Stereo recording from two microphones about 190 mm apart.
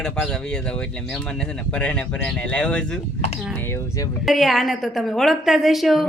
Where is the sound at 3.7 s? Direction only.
15° left (ahead or behind).